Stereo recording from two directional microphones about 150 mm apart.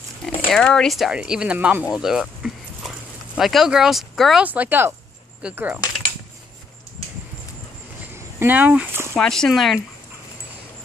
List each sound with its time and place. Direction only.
0.5 s speech: 5° left (ahead or behind); by 5.8 s 10° right (ahead or behind)
8.1 s speech: 15° right (ahead or behind)
9.1 s speech: 5° left (ahead or behind)